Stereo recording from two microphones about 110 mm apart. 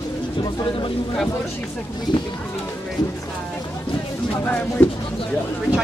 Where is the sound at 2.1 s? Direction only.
50° left (ahead or behind).